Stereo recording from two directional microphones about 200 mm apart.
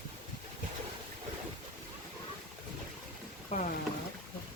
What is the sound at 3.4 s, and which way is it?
Rowboat, 40° left (ahead or behind).